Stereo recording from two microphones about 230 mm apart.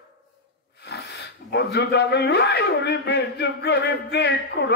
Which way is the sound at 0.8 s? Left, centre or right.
Left.